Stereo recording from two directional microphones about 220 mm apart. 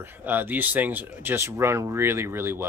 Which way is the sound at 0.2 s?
10° right (ahead or behind).